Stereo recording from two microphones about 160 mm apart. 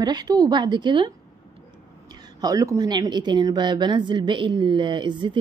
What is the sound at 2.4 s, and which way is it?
Speech, 20° right (ahead or behind).